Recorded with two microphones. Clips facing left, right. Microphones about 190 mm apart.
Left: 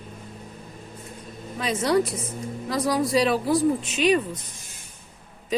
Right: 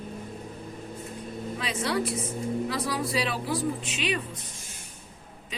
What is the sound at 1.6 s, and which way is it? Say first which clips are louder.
Speech: left 7 dB; 40° left (ahead or behind).